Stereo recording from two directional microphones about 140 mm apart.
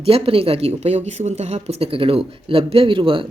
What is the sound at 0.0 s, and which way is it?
Speech, 40° right (ahead or behind).